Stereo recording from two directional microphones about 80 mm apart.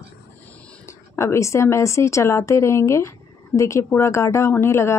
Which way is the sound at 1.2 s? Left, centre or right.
Left.